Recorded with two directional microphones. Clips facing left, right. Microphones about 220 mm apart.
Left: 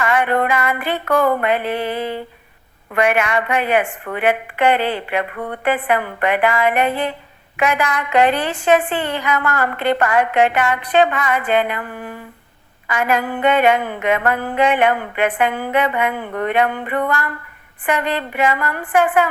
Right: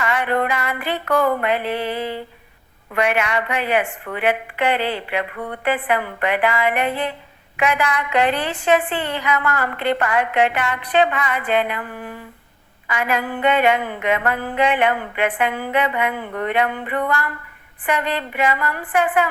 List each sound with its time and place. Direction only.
0.0 s a woman's voice: 50° left (ahead or behind)